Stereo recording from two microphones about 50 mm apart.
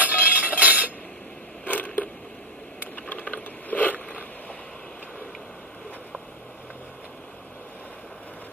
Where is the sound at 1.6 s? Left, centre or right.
Left.